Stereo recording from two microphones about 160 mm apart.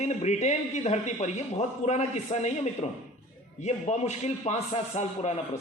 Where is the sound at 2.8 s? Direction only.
35° left (ahead or behind).